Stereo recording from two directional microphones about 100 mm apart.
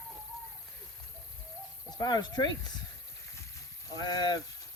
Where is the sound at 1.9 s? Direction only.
45° left (ahead or behind).